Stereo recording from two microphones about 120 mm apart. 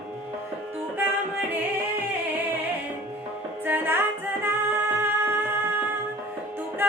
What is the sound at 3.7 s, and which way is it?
Music, 15° right (ahead or behind).